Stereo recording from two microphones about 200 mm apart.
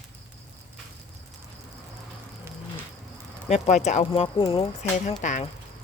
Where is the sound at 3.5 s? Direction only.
35° left (ahead or behind).